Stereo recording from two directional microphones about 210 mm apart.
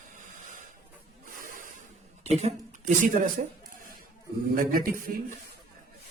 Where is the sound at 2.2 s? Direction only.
30° right (ahead or behind).